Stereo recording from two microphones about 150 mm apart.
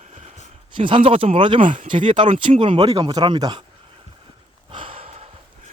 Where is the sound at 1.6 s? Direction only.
60° right (ahead or behind).